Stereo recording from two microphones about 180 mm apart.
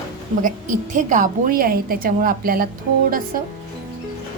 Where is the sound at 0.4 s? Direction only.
45° right (ahead or behind).